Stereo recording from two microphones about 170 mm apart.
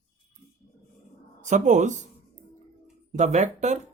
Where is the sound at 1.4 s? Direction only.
45° right (ahead or behind).